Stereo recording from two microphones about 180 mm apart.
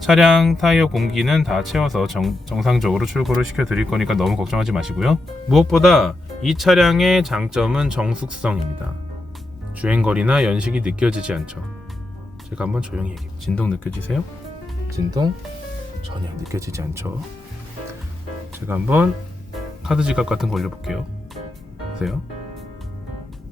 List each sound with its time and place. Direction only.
0.0 s speech: centre (ahead or behind)
9.8 s speech: 5° right (ahead or behind)
12.5 s speech: 5° right (ahead or behind)
13.6 s speech: 5° left (ahead or behind)
14.9 s speech: 20° right (ahead or behind)
16.5 s speech: 15° right (ahead or behind)
18.7 s speech: 10° right (ahead or behind)